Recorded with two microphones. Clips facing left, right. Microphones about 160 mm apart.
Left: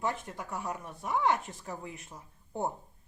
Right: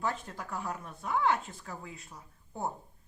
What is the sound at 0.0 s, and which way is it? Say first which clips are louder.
Speech: left 1 dB; 20° left (ahead or behind).